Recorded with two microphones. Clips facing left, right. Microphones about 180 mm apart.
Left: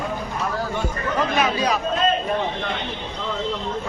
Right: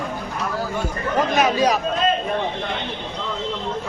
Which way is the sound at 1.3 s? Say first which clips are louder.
Right 5 dB; 45° right (ahead or behind).